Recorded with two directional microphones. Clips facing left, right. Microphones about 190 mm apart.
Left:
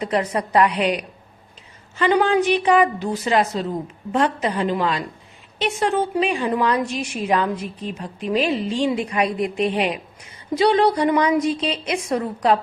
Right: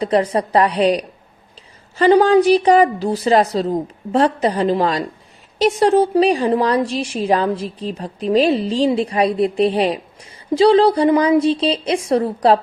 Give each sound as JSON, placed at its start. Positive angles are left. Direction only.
{"t": 0.0, "sound": "a woman's voice", "side_deg": -30}